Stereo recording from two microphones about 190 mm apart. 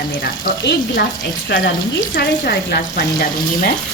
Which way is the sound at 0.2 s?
60° left (ahead or behind).